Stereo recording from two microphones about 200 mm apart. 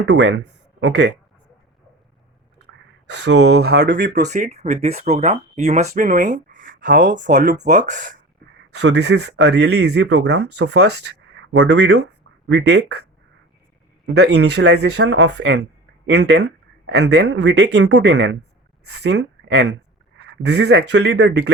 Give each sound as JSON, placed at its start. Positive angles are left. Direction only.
{"t": 0.0, "sound": "speech", "side_deg": -60}
{"t": 3.1, "sound": "speech", "side_deg": -60}
{"t": 8.7, "sound": "speech", "side_deg": -60}
{"t": 14.1, "sound": "speech", "side_deg": -55}